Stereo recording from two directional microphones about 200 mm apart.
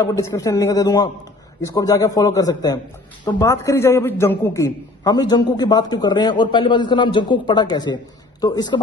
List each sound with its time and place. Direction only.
0.0 s a man's voice: 15° left (ahead or behind)